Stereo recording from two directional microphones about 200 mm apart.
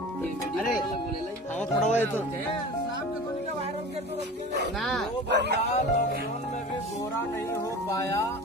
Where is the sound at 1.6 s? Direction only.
10° left (ahead or behind).